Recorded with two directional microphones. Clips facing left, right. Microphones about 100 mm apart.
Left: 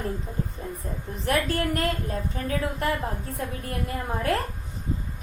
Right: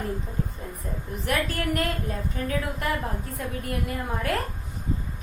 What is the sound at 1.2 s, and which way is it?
Speech, 30° left (ahead or behind).